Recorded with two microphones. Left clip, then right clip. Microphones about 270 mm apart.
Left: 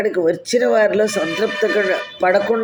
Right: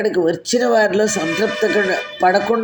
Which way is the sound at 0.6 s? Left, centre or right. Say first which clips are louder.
Even; right.